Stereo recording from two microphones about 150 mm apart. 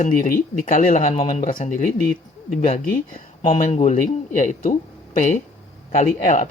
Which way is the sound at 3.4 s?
40° left (ahead or behind).